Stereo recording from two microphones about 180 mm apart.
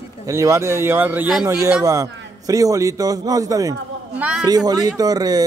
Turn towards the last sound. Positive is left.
turn(degrees=-20)  # may be behind; listen again after turning